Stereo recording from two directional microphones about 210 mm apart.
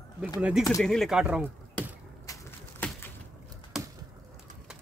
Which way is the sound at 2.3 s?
10° left (ahead or behind).